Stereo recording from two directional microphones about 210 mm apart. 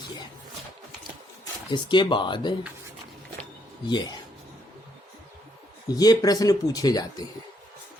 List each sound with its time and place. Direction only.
1.7 s speech: 20° left (ahead or behind)
3.8 s speech: 20° left (ahead or behind)
5.9 s speech: 20° left (ahead or behind)